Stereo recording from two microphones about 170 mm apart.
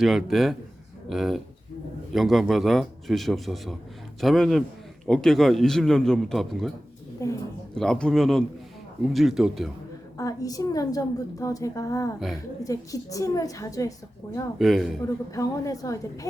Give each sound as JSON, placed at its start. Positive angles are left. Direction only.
{"t": 0.0, "sound": "a man's voice", "side_deg": 0}
{"t": 7.2, "sound": "a woman's voice", "side_deg": 15}
{"t": 7.8, "sound": "a man's voice", "side_deg": 5}
{"t": 10.2, "sound": "a woman's voice", "side_deg": 20}
{"t": 14.6, "sound": "a man's voice", "side_deg": 0}
{"t": 15.3, "sound": "a woman's voice", "side_deg": 20}